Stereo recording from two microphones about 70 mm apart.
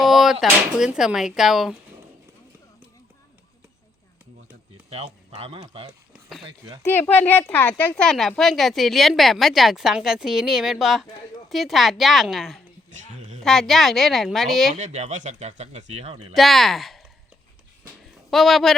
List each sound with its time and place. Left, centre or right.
0.0 s a sound: centre
0.9 s speech: centre
7.1 s speech: left
7.9 s speech: centre
16.3 s speech: centre
18.3 s speech: centre